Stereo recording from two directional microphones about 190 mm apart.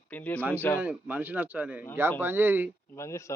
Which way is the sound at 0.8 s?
10° right (ahead or behind).